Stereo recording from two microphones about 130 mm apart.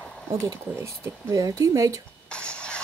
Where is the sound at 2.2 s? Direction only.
10° left (ahead or behind).